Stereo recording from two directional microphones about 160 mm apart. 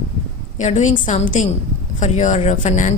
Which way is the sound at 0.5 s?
50° left (ahead or behind).